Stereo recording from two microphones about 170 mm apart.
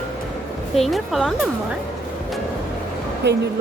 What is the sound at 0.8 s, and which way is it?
Speech, centre (ahead or behind).